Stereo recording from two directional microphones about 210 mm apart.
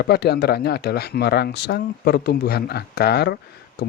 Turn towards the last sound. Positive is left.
turn(degrees=50)  # may be behind; listen again after turning